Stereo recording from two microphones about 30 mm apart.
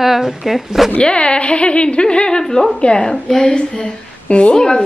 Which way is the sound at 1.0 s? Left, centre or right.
Left.